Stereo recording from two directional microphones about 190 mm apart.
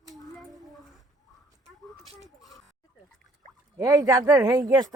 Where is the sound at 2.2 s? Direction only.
Centre (ahead or behind).